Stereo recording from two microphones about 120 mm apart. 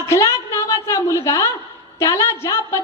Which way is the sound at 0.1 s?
25° left (ahead or behind).